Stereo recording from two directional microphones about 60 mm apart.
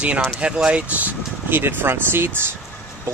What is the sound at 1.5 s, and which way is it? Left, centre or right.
Speech, right.